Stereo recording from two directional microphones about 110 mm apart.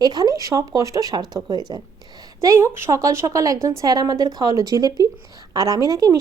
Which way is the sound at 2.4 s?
25° right (ahead or behind).